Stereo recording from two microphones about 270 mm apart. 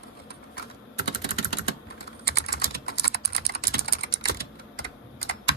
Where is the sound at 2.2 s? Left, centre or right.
Left.